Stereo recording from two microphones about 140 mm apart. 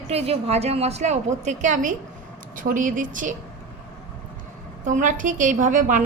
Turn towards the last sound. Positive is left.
turn(degrees=-70)  # may be behind; listen again after turning